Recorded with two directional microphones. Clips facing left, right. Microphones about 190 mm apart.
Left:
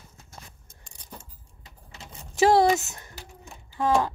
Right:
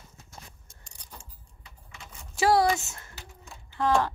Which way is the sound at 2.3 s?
20° left (ahead or behind).